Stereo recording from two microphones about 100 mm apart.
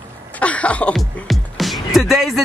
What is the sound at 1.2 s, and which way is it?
Music, centre (ahead or behind).